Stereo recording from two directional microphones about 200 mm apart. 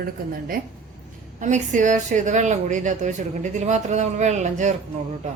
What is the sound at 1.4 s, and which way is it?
Speech, 40° right (ahead or behind).